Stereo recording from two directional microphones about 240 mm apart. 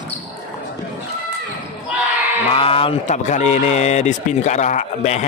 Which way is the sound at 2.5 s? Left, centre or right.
Left.